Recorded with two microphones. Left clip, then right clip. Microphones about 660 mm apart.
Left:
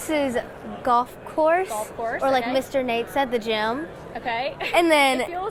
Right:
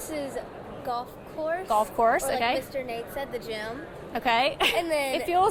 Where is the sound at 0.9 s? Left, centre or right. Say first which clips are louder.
Left 12 dB; left.